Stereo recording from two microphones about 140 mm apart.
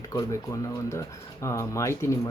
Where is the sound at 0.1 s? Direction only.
25° left (ahead or behind).